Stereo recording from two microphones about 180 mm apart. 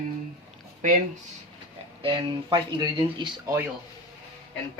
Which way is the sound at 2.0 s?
30° right (ahead or behind).